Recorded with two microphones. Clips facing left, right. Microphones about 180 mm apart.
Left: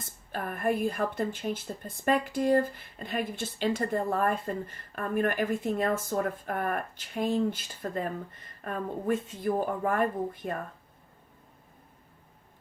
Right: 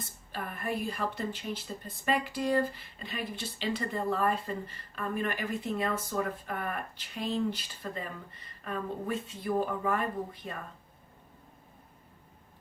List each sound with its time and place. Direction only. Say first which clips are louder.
0.0 s speech: left 4 dB; 50° left (ahead or behind)